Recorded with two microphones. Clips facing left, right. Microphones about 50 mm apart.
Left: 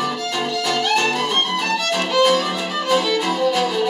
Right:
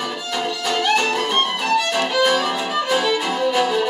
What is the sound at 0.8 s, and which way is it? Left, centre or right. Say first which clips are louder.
Music: right 2 dB; centre.